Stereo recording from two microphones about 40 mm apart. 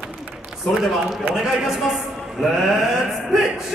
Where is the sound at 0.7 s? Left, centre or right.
Centre.